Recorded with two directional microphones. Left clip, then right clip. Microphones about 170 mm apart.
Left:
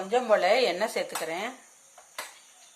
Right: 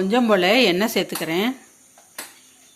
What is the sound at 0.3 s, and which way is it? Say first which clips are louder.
Speech: right 5 dB; 20° right (ahead or behind).